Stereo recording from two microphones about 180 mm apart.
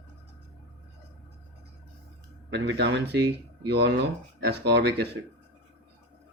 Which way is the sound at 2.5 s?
70° right (ahead or behind).